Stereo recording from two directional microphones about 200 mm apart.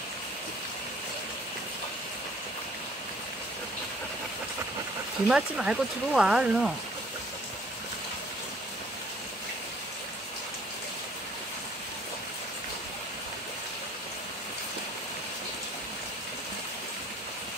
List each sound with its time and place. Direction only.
5.3 s speech: 5° right (ahead or behind)